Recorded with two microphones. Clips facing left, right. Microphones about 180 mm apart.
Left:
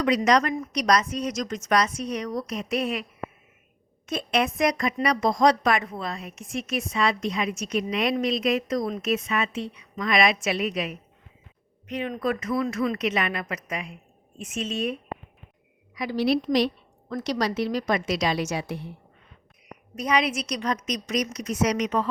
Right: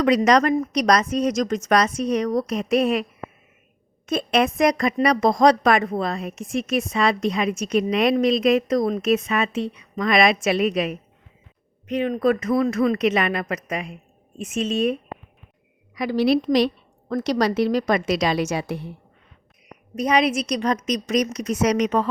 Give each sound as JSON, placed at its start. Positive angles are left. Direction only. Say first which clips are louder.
{"t": 0.0, "sound": "a woman's voice", "louder": "right 4 dB", "side_deg": -60}
{"t": 4.1, "sound": "a woman's voice", "louder": "right 5 dB", "side_deg": -55}
{"t": 16.0, "sound": "a woman's voice", "louder": "right 4 dB", "side_deg": -75}
{"t": 17.2, "sound": "a woman's voice", "louder": "right 5 dB", "side_deg": -55}
{"t": 20.0, "sound": "a woman's voice", "louder": "right 5 dB", "side_deg": -55}